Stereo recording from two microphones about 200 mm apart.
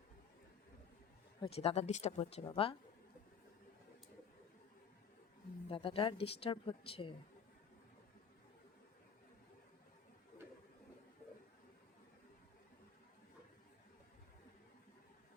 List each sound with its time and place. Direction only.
1.4 s a woman's voice: 30° left (ahead or behind)
5.6 s a woman's voice: 30° left (ahead or behind)